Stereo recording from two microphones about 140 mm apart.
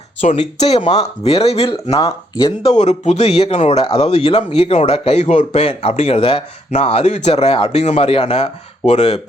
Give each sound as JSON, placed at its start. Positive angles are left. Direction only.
{"t": 0.2, "sound": "speech", "side_deg": 50}
{"t": 1.7, "sound": "speech", "side_deg": 25}
{"t": 2.7, "sound": "speech", "side_deg": 55}